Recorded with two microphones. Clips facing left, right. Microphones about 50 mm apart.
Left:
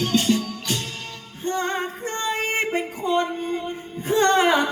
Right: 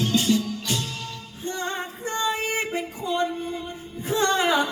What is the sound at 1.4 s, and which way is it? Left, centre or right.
Female singing, left.